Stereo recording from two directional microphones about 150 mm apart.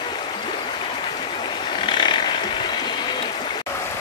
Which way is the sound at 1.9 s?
30° left (ahead or behind).